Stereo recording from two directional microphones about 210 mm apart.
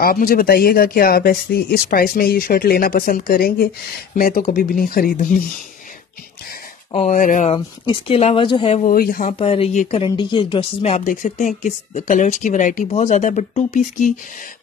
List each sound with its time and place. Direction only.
0.0 s speech: 45° left (ahead or behind)
6.9 s speech: 35° left (ahead or behind)
7.5 s speech: 25° left (ahead or behind)
8.8 s speech: 45° left (ahead or behind)
9.4 s speech: 25° left (ahead or behind)